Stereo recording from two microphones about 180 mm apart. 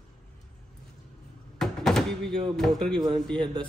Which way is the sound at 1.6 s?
5° left (ahead or behind).